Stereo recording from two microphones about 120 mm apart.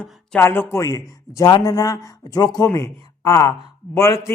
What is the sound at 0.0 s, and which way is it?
Speech, 5° left (ahead or behind).